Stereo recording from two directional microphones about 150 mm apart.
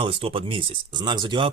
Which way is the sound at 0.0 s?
40° right (ahead or behind).